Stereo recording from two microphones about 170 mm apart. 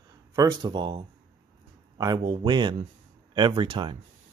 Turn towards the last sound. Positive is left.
turn(degrees=-35)  # may be behind; listen again after turning